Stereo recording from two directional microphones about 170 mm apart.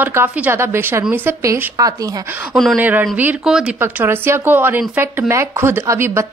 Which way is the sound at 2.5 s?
Centre (ahead or behind).